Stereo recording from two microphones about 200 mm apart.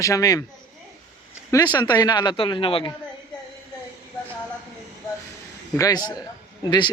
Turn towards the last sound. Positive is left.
turn(degrees=20)  # may be behind; listen again after turning